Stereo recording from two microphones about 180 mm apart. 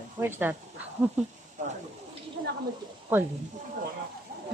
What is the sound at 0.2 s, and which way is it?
Speech, 10° right (ahead or behind).